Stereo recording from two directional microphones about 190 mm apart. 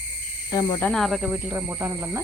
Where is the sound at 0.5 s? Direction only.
15° left (ahead or behind).